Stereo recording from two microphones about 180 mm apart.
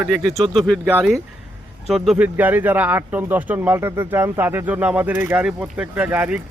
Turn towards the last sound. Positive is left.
turn(degrees=-10)  # may be behind; listen again after turning